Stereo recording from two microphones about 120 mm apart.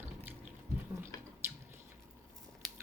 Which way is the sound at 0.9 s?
20° right (ahead or behind).